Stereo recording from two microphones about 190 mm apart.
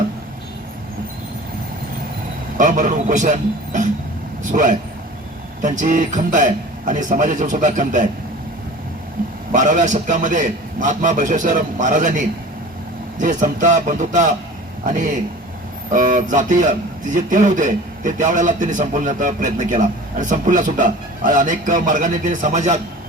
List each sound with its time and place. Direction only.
2.6 s a man's voice: 40° right (ahead or behind)
9.5 s a man's voice: 40° right (ahead or behind)